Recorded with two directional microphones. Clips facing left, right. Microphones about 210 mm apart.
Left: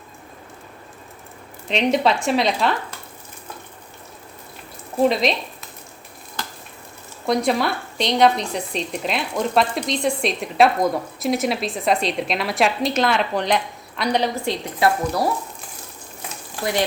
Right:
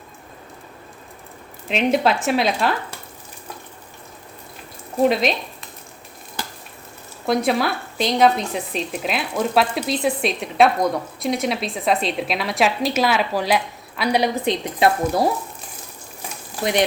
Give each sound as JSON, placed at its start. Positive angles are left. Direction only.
{"t": 1.6, "sound": "speech", "side_deg": -5}
{"t": 4.9, "sound": "speech", "side_deg": 0}
{"t": 7.3, "sound": "speech", "side_deg": 0}
{"t": 14.4, "sound": "speech", "side_deg": -20}